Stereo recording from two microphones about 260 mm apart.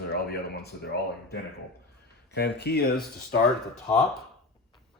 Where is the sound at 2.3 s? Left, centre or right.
Left.